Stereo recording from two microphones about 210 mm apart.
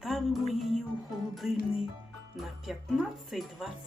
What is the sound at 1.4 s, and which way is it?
Speech, centre (ahead or behind).